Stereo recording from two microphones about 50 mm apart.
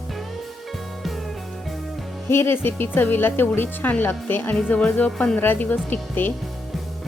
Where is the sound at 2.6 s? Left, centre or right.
Left.